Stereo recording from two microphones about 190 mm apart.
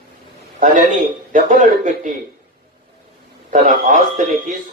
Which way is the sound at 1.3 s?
45° right (ahead or behind).